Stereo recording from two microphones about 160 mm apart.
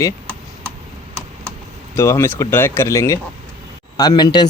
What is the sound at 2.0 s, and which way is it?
Speech, 15° left (ahead or behind).